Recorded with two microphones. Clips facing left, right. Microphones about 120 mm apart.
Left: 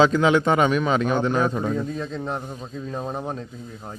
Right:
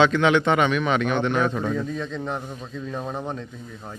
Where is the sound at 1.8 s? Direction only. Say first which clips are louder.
Even; 35° left (ahead or behind).